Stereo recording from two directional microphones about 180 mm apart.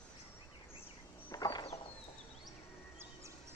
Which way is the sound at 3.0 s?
15° right (ahead or behind).